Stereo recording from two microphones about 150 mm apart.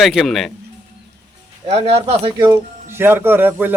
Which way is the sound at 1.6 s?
40° right (ahead or behind).